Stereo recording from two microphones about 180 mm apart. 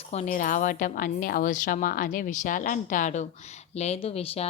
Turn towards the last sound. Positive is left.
turn(degrees=35)  # may be behind; listen again after turning